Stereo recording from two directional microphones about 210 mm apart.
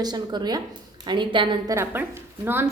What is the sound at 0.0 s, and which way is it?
A woman's voice, 20° right (ahead or behind).